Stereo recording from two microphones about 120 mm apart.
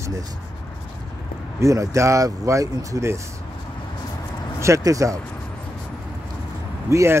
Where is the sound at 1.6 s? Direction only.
25° right (ahead or behind).